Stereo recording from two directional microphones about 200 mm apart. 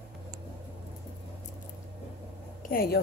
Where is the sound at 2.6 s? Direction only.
45° left (ahead or behind).